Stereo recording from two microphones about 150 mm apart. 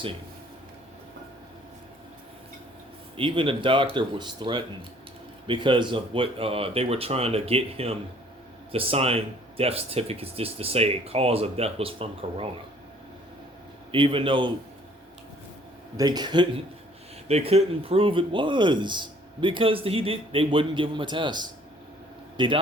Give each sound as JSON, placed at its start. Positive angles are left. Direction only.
{"t": 3.2, "sound": "speech", "side_deg": -35}
{"t": 13.9, "sound": "speech", "side_deg": -35}
{"t": 16.0, "sound": "speech", "side_deg": -25}
{"t": 17.2, "sound": "speech", "side_deg": -45}